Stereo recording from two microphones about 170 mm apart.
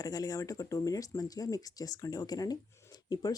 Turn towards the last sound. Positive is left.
turn(degrees=20)  # may be behind; listen again after turning